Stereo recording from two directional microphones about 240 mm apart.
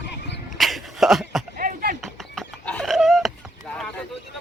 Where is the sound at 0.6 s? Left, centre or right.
Centre.